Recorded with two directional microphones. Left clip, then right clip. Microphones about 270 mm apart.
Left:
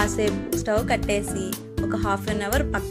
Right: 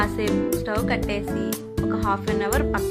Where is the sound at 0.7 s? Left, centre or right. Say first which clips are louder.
Left 2 dB; centre.